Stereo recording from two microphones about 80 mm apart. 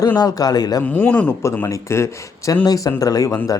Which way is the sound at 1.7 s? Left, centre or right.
Left.